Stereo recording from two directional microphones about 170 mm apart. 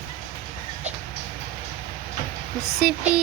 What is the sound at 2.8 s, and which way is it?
Speech, 5° right (ahead or behind).